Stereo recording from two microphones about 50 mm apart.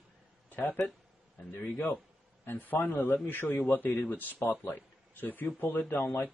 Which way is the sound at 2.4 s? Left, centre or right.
Left.